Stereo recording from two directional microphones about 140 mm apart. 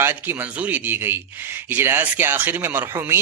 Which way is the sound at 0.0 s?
15° right (ahead or behind).